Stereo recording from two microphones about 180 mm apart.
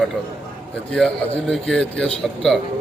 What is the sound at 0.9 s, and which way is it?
Speech, 5° left (ahead or behind).